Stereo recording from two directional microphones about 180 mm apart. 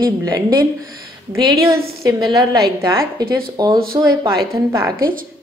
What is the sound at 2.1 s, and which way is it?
A woman's voice, 20° right (ahead or behind).